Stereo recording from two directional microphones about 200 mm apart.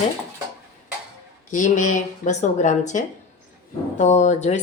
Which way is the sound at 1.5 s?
40° left (ahead or behind).